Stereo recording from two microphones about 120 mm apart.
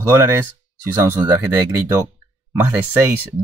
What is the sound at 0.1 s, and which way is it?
Speech, 20° right (ahead or behind).